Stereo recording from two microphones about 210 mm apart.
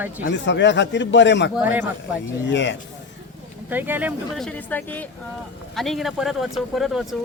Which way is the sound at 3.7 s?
10° right (ahead or behind).